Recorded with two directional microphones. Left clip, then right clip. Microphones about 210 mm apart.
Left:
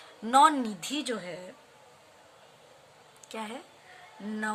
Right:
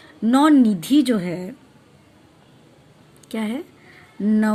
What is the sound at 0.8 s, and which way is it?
Speech, 25° right (ahead or behind).